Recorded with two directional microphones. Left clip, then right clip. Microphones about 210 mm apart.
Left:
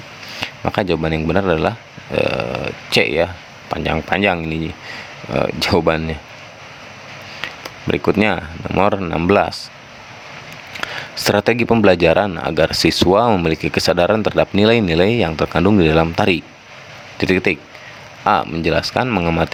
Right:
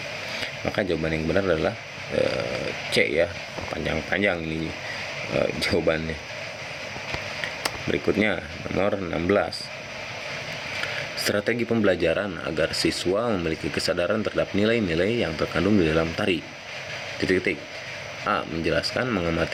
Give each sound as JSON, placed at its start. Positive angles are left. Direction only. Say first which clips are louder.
{"t": 0.4, "sound": "speech", "louder": "left 8 dB", "side_deg": 50}
{"t": 7.9, "sound": "speech", "louder": "left 8 dB", "side_deg": 50}
{"t": 11.3, "sound": "speech", "louder": "left 11 dB", "side_deg": 50}